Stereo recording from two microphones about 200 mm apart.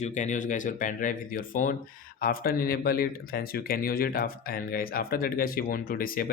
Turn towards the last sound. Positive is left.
turn(degrees=45)  # may be behind; listen again after turning